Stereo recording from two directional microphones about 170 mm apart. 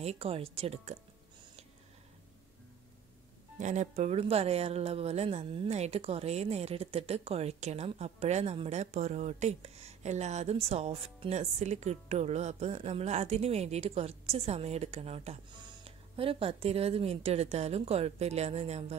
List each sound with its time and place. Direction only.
0.0 s speech: 35° right (ahead or behind)
3.5 s speech: 45° right (ahead or behind)